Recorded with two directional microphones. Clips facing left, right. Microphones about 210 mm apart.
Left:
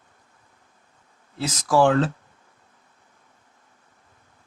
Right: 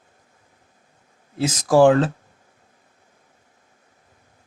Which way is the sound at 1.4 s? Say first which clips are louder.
Right 5 dB; 50° right (ahead or behind).